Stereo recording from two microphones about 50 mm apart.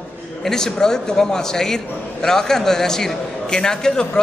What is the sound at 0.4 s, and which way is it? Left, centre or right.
A man's voice, centre.